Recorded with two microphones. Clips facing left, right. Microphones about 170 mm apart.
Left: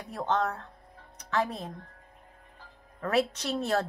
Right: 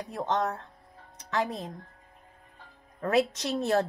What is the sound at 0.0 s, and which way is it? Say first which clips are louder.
Speech: even; 35° right (ahead or behind).